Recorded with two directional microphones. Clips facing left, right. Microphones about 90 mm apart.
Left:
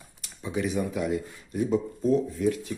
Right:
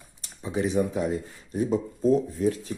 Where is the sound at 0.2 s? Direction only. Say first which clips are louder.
Right 2 dB; 30° right (ahead or behind).